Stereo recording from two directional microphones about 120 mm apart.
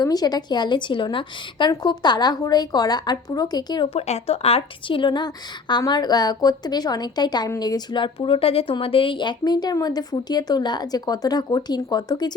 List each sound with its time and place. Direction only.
0.0 s speech: 30° left (ahead or behind)
3.8 s speech: 60° left (ahead or behind); by 12.3 s 35° left (ahead or behind)